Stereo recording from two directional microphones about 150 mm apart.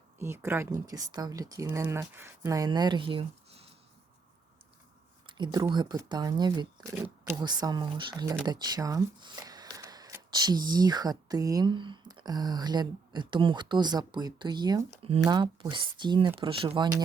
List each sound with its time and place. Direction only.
0.2 s speech: 15° right (ahead or behind); by 3.8 s 40° right (ahead or behind)
5.2 s a sound: 30° right (ahead or behind)
5.7 s speech: 30° right (ahead or behind)
6.9 s speech: 10° right (ahead or behind)
7.3 s speech: 25° right (ahead or behind)
8.4 s shuffling cards: 25° right (ahead or behind)
10.3 s speech: 25° right (ahead or behind)